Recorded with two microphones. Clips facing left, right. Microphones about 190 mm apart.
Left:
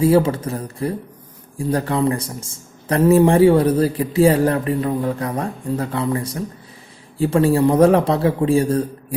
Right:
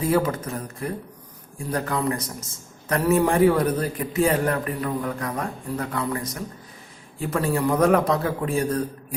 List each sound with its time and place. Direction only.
0.0 s a man's voice: 30° left (ahead or behind)